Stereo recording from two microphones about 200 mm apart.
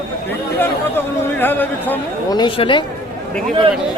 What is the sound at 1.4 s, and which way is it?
Speech, 10° left (ahead or behind).